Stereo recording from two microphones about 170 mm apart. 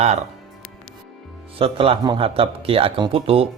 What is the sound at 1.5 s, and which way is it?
Speech, 35° right (ahead or behind).